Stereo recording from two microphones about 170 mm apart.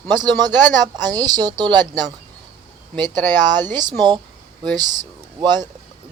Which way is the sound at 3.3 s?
25° right (ahead or behind).